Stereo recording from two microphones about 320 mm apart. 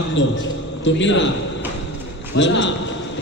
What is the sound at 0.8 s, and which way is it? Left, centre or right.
Speech, left.